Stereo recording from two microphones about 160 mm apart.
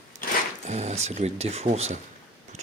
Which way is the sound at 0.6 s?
45° right (ahead or behind).